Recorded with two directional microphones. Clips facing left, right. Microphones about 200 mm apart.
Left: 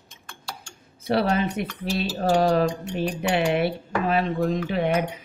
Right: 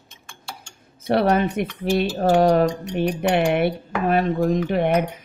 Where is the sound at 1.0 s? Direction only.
55° right (ahead or behind).